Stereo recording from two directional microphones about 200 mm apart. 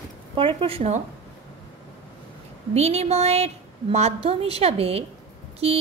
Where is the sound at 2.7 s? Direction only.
30° right (ahead or behind).